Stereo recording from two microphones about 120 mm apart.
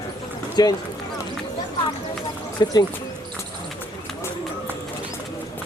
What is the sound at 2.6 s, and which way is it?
Speech, 35° left (ahead or behind).